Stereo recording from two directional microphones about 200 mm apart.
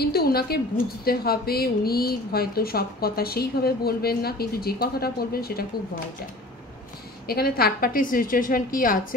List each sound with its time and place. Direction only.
0.0 s a woman's voice: 50° left (ahead or behind)
7.2 s a woman's voice: 50° left (ahead or behind)